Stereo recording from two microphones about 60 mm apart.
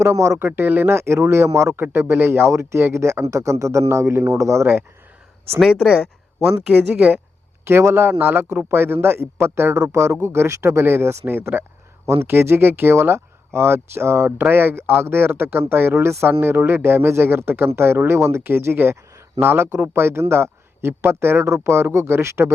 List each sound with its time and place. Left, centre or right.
0.0 s speech: right
0.3 s a man's voice: right
5.5 s speech: centre
6.7 s speech: right
7.6 s a man's voice: right
12.0 s speech: right
12.3 s a man's voice: right